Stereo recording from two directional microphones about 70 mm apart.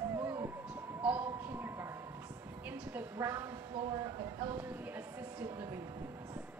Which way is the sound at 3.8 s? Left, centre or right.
Right.